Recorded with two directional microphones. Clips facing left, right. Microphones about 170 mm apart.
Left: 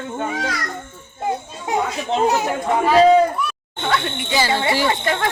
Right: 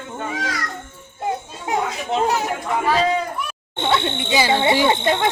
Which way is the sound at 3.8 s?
25° right (ahead or behind).